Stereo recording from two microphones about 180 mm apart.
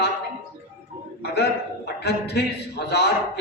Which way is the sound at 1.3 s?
65° left (ahead or behind).